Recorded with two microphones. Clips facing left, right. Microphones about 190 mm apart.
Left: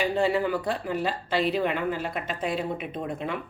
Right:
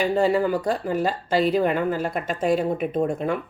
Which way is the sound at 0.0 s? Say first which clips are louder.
Right 4 dB; 40° right (ahead or behind).